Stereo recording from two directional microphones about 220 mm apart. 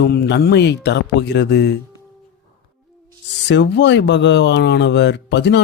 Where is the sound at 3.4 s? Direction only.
50° left (ahead or behind).